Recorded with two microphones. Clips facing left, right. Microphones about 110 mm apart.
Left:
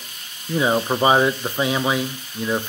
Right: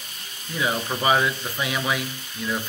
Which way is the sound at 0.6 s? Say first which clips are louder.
Left 7 dB; 30° left (ahead or behind).